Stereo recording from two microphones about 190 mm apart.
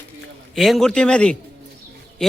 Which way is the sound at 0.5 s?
Centre (ahead or behind).